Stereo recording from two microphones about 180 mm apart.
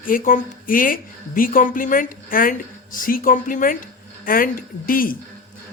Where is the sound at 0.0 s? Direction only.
50° left (ahead or behind).